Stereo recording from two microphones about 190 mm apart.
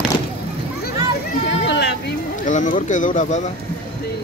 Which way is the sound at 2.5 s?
40° left (ahead or behind).